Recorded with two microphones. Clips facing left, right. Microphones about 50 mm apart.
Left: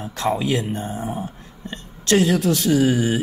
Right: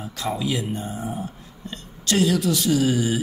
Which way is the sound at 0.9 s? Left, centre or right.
Left.